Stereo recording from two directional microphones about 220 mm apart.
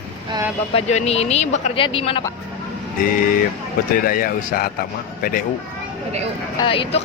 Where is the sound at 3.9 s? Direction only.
40° left (ahead or behind).